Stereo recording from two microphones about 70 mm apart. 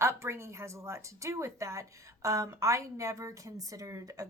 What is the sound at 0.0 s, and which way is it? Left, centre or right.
Speech, right.